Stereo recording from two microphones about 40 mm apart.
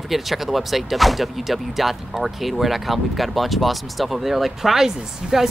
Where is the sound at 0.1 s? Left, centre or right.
Centre.